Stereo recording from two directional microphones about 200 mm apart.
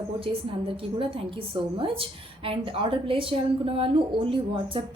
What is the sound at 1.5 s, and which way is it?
A woman's voice, 25° right (ahead or behind).